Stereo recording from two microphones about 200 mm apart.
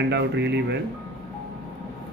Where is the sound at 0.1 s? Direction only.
60° right (ahead or behind).